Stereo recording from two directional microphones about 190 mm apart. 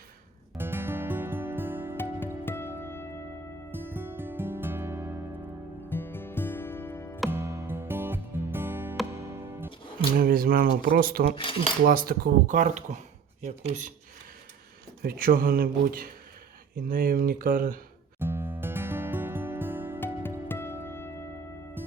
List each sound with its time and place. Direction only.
0.5 s music: 10° right (ahead or behind)
2.1 s music: 10° left (ahead or behind)
3.7 s music: 10° right (ahead or behind)
5.9 s music: 10° left (ahead or behind)
7.3 s music: 15° right (ahead or behind)
10.2 s speech: 50° right (ahead or behind)
15.0 s speech: 50° right (ahead or behind)
18.2 s music: 10° right (ahead or behind)
20.5 s music: 10° left (ahead or behind)